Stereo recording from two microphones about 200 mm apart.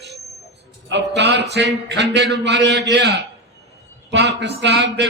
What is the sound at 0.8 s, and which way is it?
A man's voice, 60° right (ahead or behind).